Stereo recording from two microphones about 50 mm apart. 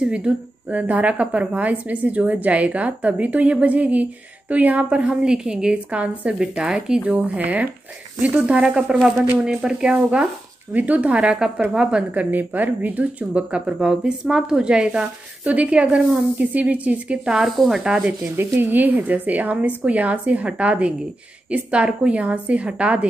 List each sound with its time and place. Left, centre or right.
0.0 s a woman's voice: right
7.0 s speech: right
8.6 s speech: centre
10.7 s a woman's voice: right; by 12.0 s centre
12.1 s a woman's voice: right
17.2 s speech: centre
18.3 s a woman's voice: right